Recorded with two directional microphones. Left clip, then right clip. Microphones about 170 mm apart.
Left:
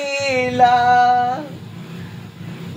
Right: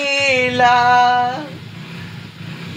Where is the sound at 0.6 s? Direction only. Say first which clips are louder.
Even; 20° right (ahead or behind).